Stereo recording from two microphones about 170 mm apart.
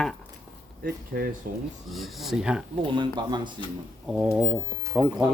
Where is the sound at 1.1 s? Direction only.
60° right (ahead or behind).